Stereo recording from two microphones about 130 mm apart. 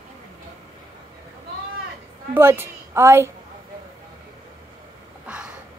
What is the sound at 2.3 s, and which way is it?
A woman's voice, 15° right (ahead or behind).